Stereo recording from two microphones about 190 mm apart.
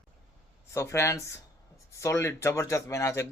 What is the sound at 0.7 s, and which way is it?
Speech, 15° left (ahead or behind).